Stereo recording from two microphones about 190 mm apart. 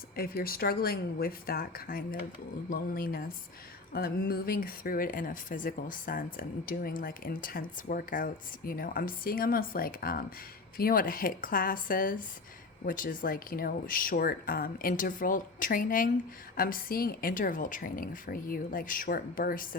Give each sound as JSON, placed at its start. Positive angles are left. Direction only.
{"t": 0.2, "sound": "speech", "side_deg": 50}